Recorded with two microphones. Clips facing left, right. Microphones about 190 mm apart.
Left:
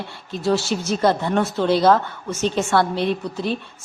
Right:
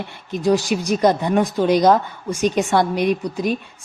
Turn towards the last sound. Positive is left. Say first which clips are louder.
# right 3 dB
turn(degrees=-15)  # may be behind; listen again after turning